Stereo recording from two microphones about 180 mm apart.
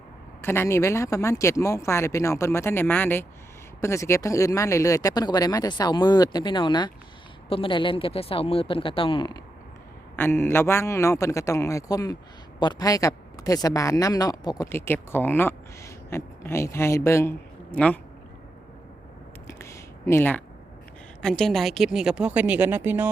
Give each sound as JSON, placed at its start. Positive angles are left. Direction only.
{"t": 0.4, "sound": "a woman's voice", "side_deg": 15}
{"t": 10.2, "sound": "a woman's voice", "side_deg": 10}
{"t": 19.5, "sound": "a sound", "side_deg": 15}
{"t": 21.2, "sound": "speech", "side_deg": 5}